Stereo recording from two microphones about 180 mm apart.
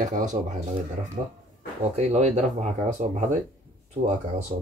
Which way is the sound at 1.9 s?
40° right (ahead or behind).